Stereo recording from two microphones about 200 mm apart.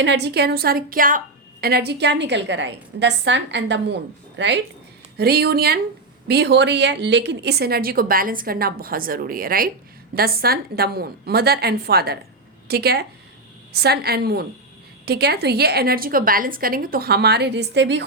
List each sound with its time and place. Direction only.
0.0 s a woman's voice: 60° right (ahead or behind)